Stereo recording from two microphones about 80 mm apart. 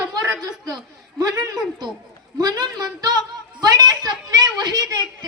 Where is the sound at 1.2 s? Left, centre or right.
Right.